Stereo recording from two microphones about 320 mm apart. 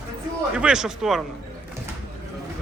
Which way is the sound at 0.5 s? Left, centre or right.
Centre.